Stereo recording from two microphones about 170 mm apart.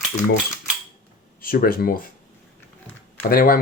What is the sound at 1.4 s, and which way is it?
Speech, 60° left (ahead or behind).